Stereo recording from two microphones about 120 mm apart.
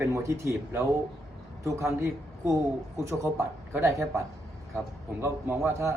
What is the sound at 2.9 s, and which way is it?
A man's voice, 25° right (ahead or behind).